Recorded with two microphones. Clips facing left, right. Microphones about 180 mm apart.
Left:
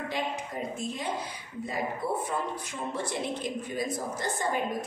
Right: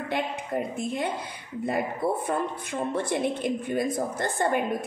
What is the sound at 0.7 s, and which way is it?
Speech, 55° right (ahead or behind).